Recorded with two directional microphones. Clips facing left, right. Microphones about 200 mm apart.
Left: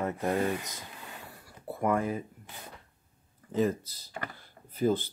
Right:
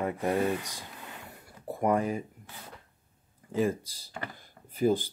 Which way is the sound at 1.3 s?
20° right (ahead or behind).